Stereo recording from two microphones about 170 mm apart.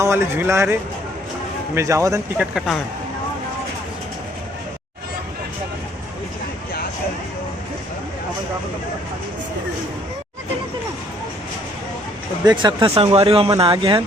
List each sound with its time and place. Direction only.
0.0 s speech: 15° right (ahead or behind)
2.4 s speech: centre (ahead or behind)
12.5 s speech: 25° right (ahead or behind)